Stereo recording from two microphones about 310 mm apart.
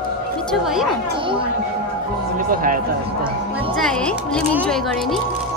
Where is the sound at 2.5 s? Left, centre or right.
Right.